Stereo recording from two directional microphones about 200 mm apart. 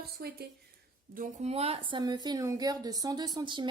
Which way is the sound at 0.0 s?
50° right (ahead or behind).